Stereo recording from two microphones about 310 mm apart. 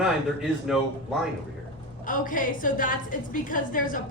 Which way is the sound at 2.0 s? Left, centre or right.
Left.